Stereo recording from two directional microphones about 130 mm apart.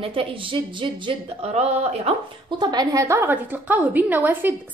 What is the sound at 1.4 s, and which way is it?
Speech, 55° right (ahead or behind).